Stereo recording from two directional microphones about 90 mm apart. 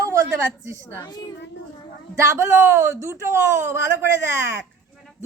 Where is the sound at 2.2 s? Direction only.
30° right (ahead or behind).